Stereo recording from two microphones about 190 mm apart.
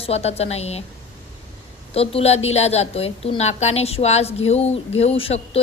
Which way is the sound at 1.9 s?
30° left (ahead or behind).